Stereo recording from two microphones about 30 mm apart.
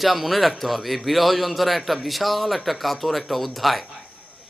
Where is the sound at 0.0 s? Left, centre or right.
Centre.